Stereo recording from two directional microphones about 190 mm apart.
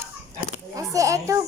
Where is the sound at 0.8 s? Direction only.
15° right (ahead or behind).